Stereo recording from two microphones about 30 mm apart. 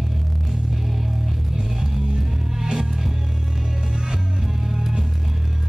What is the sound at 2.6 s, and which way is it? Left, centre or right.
Music, right.